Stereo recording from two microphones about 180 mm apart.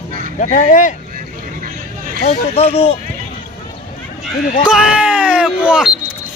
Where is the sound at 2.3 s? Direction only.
35° left (ahead or behind).